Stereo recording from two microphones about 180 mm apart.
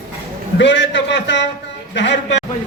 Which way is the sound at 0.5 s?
85° left.